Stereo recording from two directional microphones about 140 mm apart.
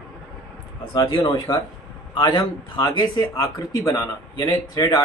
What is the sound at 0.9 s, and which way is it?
Speech, 25° left (ahead or behind).